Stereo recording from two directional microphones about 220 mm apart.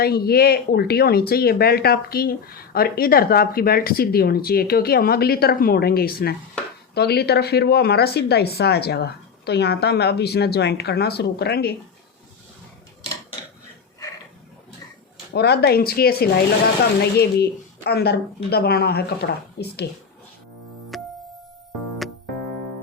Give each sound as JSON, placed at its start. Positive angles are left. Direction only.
{"t": 0.0, "sound": "speech", "side_deg": 45}
{"t": 15.3, "sound": "speech", "side_deg": 45}
{"t": 20.9, "sound": "music", "side_deg": 0}